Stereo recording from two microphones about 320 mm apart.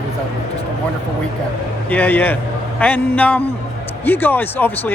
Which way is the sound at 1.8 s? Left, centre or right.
Centre.